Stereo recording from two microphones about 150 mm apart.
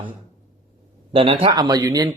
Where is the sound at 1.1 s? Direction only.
35° right (ahead or behind).